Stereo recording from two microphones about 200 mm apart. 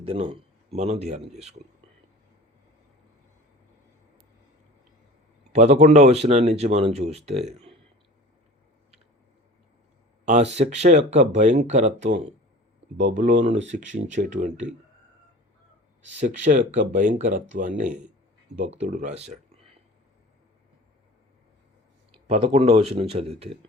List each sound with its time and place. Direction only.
0.0 s speech: 30° right (ahead or behind)
5.5 s speech: 35° right (ahead or behind)
10.2 s speech: 35° right (ahead or behind)
16.2 s speech: 40° right (ahead or behind)
18.8 s speech: 35° right (ahead or behind)
22.3 s speech: 30° right (ahead or behind)